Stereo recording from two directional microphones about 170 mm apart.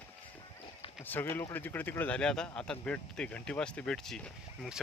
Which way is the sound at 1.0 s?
10° left (ahead or behind).